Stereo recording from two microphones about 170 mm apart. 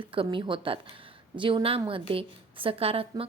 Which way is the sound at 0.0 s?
30° right (ahead or behind).